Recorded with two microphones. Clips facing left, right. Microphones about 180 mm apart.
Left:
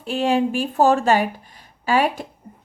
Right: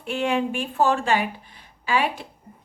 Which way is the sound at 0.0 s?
35° left (ahead or behind).